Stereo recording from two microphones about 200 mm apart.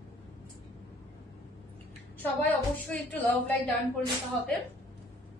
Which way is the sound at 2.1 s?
10° left (ahead or behind).